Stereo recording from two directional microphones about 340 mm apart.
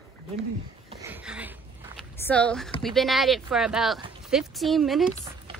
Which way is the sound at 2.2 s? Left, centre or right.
Centre.